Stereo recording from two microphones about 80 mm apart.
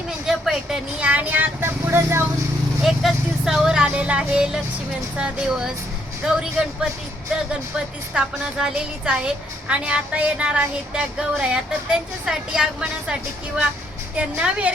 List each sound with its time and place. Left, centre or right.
0.3 s a sound: centre
0.9 s vehicle: centre
2.8 s a woman's voice: centre
8.1 s a woman's voice: centre
14.2 s a woman's voice: centre